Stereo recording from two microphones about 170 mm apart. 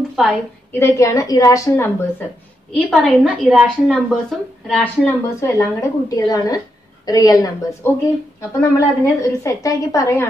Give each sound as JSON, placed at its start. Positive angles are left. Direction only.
{"t": 0.1, "sound": "a sound", "side_deg": 0}
{"t": 0.7, "sound": "a woman's voice", "side_deg": 15}
{"t": 2.7, "sound": "a woman's voice", "side_deg": 0}
{"t": 5.0, "sound": "a woman's voice", "side_deg": 15}